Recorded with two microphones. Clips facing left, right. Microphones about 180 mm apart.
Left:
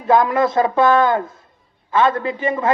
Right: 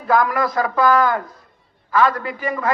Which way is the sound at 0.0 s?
25° left (ahead or behind).